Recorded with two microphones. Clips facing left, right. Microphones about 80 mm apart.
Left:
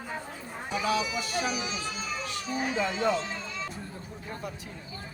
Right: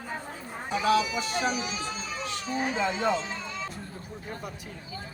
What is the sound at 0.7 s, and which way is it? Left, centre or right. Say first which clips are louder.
Speech: right 4 dB; right.